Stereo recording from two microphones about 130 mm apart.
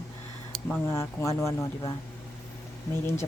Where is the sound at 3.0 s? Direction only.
20° left (ahead or behind).